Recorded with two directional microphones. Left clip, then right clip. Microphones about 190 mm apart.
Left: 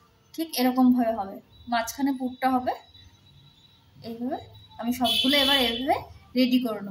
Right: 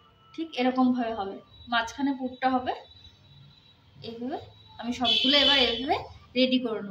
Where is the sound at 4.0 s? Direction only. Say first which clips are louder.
Left 2 dB; 35° left (ahead or behind).